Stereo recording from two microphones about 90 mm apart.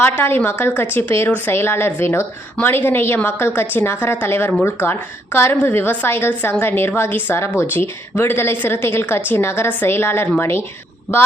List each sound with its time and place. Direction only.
0.0 s a woman's voice: 20° left (ahead or behind)